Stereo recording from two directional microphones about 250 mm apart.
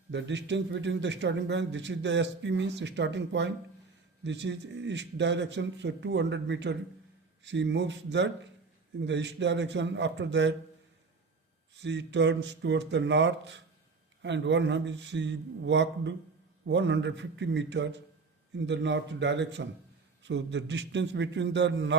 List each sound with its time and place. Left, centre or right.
0.1 s a man's voice: right
11.8 s a man's voice: right